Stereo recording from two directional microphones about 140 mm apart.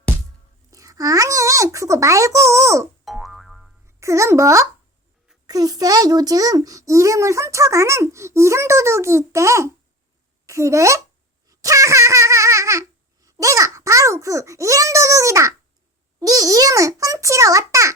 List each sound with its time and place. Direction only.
0.7 s a child's voice: 25° right (ahead or behind)
3.0 s boing: centre (ahead or behind)
3.8 s a child's voice: 20° right (ahead or behind)
11.4 s baby laughter: 25° right (ahead or behind)
16.2 s a child's voice: 25° right (ahead or behind)